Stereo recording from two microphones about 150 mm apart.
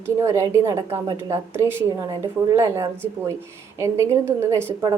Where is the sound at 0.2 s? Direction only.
20° right (ahead or behind).